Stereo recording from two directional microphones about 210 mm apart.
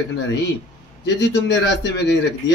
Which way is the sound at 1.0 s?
55° left (ahead or behind).